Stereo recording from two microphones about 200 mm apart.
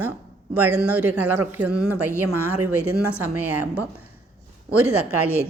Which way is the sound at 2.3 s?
90° right.